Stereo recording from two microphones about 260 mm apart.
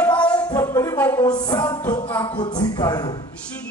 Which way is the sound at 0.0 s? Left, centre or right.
Centre.